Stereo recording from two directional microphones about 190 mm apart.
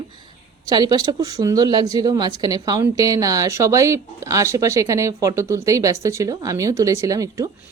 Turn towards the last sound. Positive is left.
turn(degrees=-15)  # may be behind; listen again after turning